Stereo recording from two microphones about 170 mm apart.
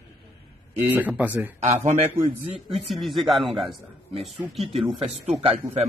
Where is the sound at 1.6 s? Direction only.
40° right (ahead or behind).